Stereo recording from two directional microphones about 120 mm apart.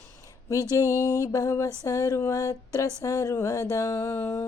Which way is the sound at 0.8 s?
25° left (ahead or behind).